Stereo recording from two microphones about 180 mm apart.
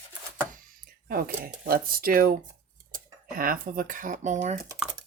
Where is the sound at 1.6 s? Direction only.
55° right (ahead or behind).